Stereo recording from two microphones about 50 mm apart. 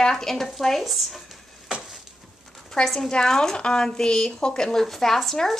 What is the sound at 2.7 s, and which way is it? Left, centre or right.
A woman's voice, centre.